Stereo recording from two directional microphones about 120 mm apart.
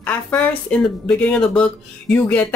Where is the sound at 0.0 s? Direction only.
10° left (ahead or behind).